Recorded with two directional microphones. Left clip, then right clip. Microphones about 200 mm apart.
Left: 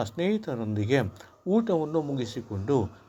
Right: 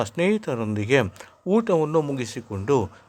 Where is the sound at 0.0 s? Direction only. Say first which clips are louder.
Right 6 dB; 25° right (ahead or behind).